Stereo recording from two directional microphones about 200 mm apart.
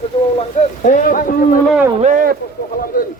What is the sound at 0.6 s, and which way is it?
Speech, 40° left (ahead or behind).